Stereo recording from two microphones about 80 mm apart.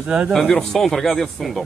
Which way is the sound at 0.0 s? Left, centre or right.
Centre.